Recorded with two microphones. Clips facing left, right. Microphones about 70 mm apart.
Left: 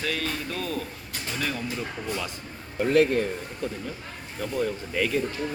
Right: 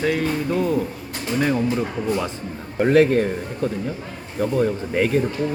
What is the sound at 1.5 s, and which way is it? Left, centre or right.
Speech, right.